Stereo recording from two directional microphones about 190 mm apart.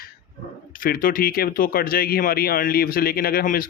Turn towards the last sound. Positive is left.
turn(degrees=50)  # may be behind; listen again after turning